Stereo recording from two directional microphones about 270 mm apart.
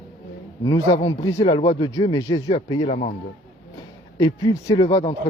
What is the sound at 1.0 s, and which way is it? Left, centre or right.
Speech, centre.